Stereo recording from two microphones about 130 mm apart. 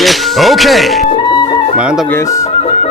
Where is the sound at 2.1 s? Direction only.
20° left (ahead or behind).